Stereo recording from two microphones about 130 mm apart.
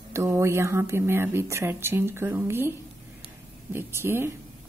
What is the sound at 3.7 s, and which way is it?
Speech, 15° right (ahead or behind).